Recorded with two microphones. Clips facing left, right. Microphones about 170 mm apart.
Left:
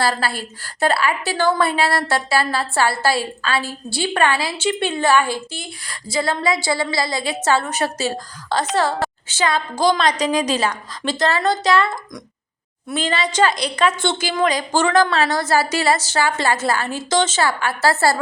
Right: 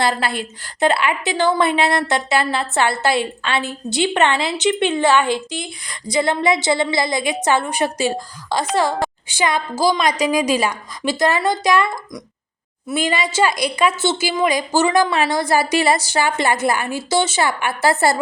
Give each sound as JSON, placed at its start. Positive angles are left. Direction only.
{"t": 0.0, "sound": "a woman's voice", "side_deg": -20}